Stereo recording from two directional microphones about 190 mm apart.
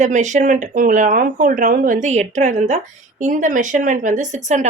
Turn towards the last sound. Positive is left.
turn(degrees=-40)  # may be behind; listen again after turning